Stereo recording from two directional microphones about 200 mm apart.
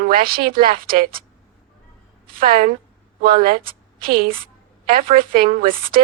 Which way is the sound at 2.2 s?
45° right (ahead or behind).